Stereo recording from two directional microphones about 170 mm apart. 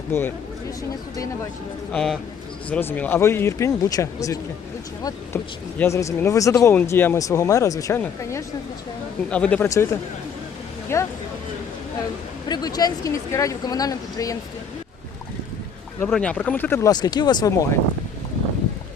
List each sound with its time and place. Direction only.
0.1 s speech: 10° left (ahead or behind)
1.9 s speech: 5° left (ahead or behind); by 4.4 s 20° left (ahead or behind)
5.8 s speech: 15° left (ahead or behind)
9.6 s speech: 15° left (ahead or behind)
12.5 s speech: 25° left (ahead or behind)
16.0 s speech: 5° left (ahead or behind)